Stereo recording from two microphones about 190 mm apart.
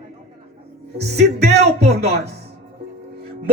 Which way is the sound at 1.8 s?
35° right (ahead or behind).